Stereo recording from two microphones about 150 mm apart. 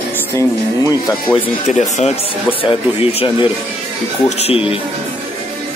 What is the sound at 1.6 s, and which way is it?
Speech, 50° left (ahead or behind).